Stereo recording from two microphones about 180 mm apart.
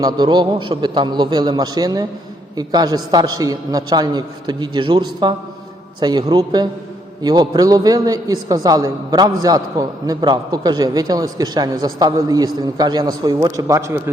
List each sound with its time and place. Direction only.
0.0 s a man's voice: 25° right (ahead or behind)